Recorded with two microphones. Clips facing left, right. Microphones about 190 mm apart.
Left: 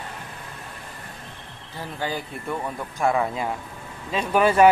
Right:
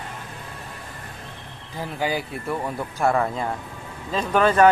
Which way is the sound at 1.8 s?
10° right (ahead or behind).